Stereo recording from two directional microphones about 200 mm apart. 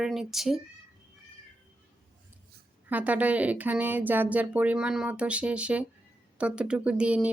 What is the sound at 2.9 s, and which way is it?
Speech, 10° right (ahead or behind).